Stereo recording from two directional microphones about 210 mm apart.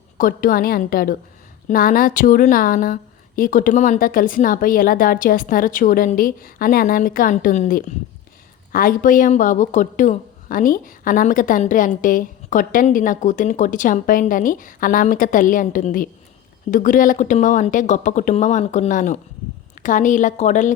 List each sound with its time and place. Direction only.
0.2 s a woman's voice: 40° left (ahead or behind)